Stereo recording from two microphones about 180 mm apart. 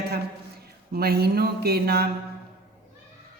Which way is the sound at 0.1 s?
60° right (ahead or behind).